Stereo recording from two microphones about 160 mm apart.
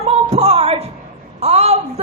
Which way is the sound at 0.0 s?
40° right (ahead or behind).